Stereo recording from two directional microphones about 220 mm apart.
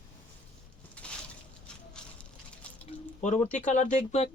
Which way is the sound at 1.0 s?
5° left (ahead or behind).